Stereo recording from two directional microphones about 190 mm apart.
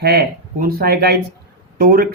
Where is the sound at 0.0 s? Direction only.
55° right (ahead or behind).